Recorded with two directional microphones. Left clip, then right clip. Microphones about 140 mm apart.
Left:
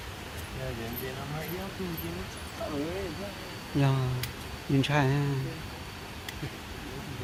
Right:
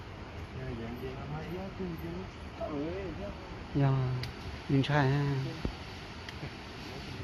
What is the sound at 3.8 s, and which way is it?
Speech, 10° left (ahead or behind).